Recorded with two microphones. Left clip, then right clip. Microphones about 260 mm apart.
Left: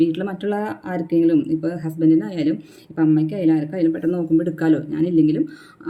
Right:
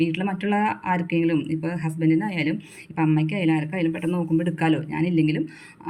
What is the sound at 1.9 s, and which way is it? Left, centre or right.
Speech, right.